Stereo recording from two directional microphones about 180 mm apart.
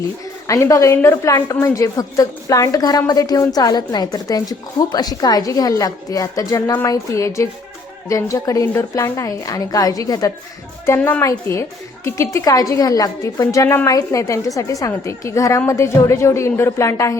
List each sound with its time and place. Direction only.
0.4 s a woman's voice: 20° left (ahead or behind)